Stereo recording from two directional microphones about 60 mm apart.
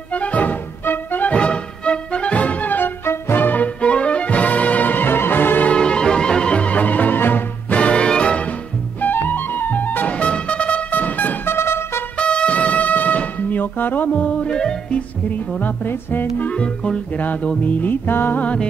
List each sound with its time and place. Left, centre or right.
0.1 s music: left
1.3 s music: centre; by 5.7 s left
5.7 s music: centre; by 7.4 s left
7.7 s music: centre
9.0 s music: left
12.2 s music: centre; by 16.4 s left
16.4 s music: centre
17.2 s music: left
18.4 s music: left